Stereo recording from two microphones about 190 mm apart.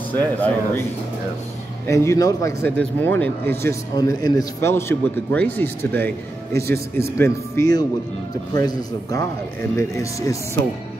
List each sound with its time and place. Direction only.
0.1 s a man's voice: 10° left (ahead or behind)
1.9 s a man's voice: 15° left (ahead or behind)